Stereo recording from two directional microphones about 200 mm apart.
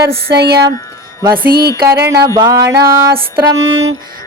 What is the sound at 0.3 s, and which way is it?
Speech, 55° right (ahead or behind).